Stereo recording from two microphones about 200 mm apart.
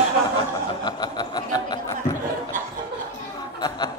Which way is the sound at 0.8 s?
20° left (ahead or behind).